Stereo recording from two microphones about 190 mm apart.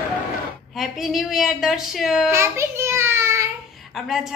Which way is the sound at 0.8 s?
Centre (ahead or behind).